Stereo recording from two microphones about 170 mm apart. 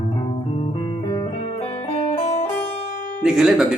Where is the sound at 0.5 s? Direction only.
35° left (ahead or behind).